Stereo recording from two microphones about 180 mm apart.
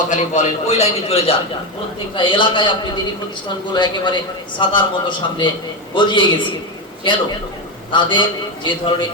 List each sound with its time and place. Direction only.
0.1 s a man's voice: 40° left (ahead or behind); by 9.0 s 25° left (ahead or behind)